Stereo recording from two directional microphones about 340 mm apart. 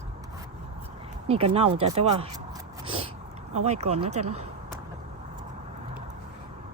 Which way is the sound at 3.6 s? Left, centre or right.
Centre.